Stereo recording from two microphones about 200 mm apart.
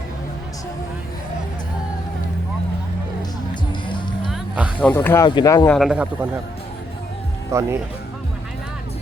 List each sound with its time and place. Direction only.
3.7 s music: 25° left (ahead or behind)
4.3 s a sound: 5° right (ahead or behind)
4.8 s speech: 10° left (ahead or behind)
5.6 s a man's voice: centre (ahead or behind)
7.5 s speech: 15° right (ahead or behind)